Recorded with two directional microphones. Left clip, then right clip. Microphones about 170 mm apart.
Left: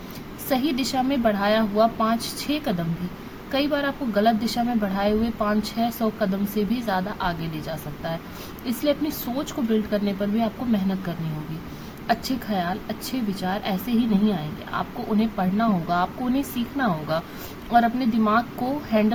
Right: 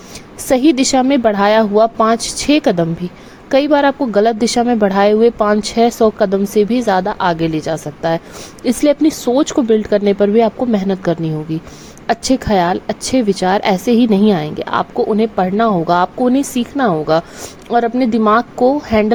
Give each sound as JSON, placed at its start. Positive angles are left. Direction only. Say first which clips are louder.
{"t": 0.4, "sound": "a woman's voice", "louder": "right 12 dB", "side_deg": -50}